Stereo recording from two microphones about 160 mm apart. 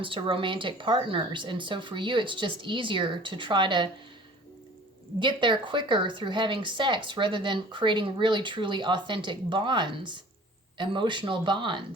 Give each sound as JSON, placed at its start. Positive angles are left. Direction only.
{"t": 0.0, "sound": "a woman's voice", "side_deg": -30}
{"t": 5.2, "sound": "a woman's voice", "side_deg": -30}